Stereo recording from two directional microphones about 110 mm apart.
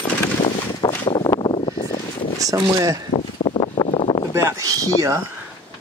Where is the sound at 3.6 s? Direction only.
55° left (ahead or behind).